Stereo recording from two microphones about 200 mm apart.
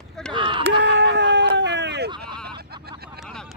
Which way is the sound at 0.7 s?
60° right (ahead or behind).